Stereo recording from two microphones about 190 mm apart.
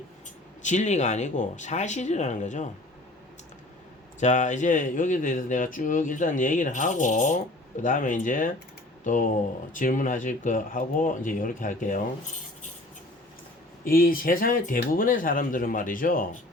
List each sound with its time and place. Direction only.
0.6 s speech: 40° left (ahead or behind)
4.2 s speech: 40° left (ahead or behind)
13.8 s speech: 50° left (ahead or behind)